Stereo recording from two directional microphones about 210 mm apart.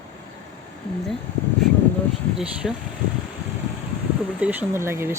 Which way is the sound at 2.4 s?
5° right (ahead or behind).